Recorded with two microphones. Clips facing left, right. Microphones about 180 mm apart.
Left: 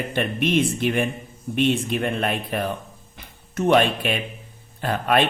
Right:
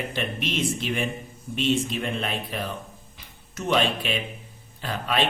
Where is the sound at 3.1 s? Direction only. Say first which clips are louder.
Left 10 dB; 55° left (ahead or behind).